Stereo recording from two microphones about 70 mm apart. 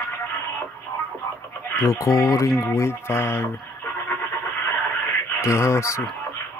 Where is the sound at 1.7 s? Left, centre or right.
Left.